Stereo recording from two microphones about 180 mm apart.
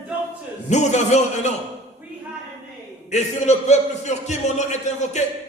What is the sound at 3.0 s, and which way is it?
A man's voice, 40° left (ahead or behind).